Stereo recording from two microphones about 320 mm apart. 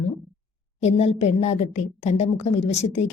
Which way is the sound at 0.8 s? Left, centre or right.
Centre.